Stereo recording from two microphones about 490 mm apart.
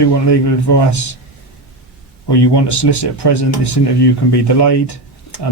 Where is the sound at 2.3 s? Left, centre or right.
Left.